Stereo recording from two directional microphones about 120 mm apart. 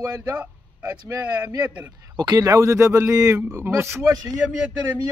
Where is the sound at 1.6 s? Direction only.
10° right (ahead or behind).